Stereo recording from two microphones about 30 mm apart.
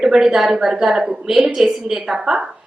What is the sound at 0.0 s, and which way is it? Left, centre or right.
A woman's voice, right.